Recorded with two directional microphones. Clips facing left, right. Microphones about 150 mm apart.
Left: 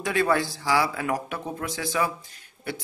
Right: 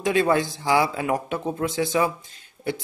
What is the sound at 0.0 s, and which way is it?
A man's voice, 20° right (ahead or behind).